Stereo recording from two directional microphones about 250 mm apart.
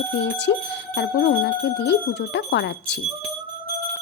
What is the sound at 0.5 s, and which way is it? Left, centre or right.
A woman's voice, left.